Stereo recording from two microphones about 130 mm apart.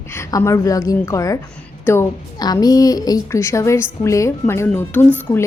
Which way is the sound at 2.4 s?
30° left (ahead or behind).